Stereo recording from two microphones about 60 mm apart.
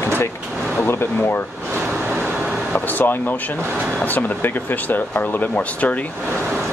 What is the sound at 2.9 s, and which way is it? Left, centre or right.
Speech, left.